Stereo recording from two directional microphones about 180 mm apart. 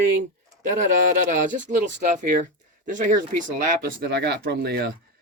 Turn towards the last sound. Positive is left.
turn(degrees=-65)  # may be behind; listen again after turning